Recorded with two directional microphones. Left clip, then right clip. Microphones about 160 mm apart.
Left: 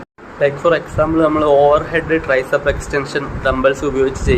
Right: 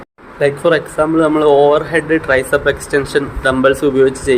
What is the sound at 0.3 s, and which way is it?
Speech, 45° right (ahead or behind).